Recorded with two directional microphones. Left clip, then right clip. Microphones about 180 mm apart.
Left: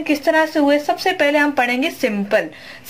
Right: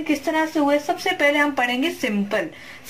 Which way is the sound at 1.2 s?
35° left (ahead or behind).